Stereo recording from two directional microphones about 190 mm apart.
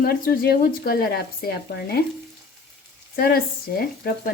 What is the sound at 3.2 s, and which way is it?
Speech, 55° left (ahead or behind).